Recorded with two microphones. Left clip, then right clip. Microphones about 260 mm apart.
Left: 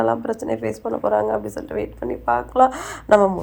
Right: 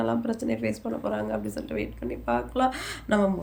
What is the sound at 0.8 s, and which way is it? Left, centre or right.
Speech, left.